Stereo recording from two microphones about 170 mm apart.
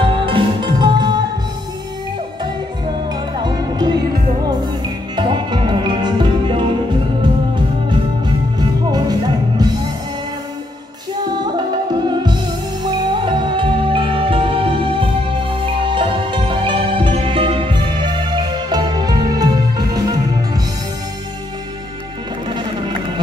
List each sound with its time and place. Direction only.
0.0 s music: 30° right (ahead or behind)
3.3 s music: 25° right (ahead or behind)
5.1 s music: 25° right (ahead or behind)
12.1 s music: 25° right (ahead or behind)
22.5 s music: 25° right (ahead or behind)